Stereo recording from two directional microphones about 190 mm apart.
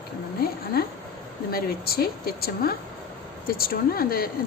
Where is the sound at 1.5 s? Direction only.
50° left (ahead or behind).